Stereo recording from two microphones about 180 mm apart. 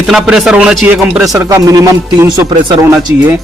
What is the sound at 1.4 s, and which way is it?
Speech, 20° right (ahead or behind).